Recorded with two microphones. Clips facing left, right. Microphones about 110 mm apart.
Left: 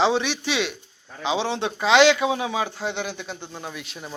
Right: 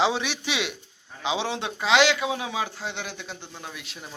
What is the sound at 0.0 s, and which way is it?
Speech, 5° right (ahead or behind).